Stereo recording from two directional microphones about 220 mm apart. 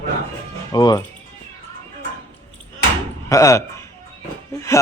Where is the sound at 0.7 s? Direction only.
20° left (ahead or behind).